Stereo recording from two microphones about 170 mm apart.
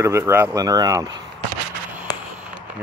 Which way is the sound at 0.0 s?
15° right (ahead or behind).